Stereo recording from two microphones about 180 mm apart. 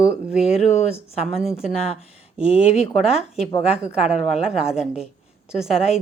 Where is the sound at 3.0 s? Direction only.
5° right (ahead or behind).